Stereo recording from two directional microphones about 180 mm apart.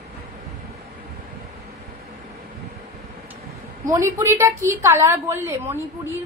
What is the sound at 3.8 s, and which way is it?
A woman's voice, 15° right (ahead or behind).